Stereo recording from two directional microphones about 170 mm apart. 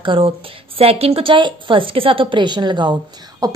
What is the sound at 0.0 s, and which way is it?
A woman's voice, 30° right (ahead or behind).